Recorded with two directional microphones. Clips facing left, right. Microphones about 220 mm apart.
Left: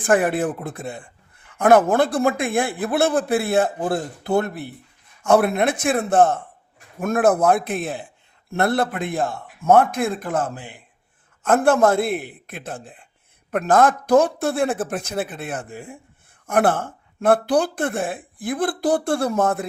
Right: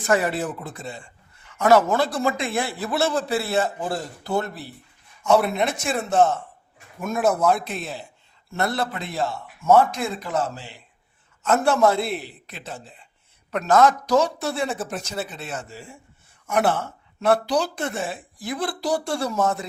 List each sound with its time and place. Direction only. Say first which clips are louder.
0.0 s a man's voice: left 4 dB; 50° left (ahead or behind)